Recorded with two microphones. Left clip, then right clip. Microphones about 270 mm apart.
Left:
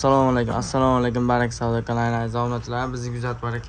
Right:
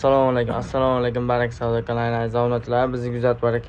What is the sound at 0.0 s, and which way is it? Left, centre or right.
Speech, left.